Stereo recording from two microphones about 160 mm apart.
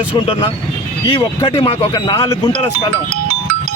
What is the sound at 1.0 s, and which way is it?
A man's voice, 25° left (ahead or behind).